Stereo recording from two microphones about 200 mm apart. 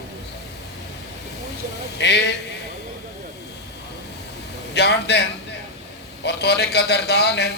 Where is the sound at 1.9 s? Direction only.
55° left (ahead or behind).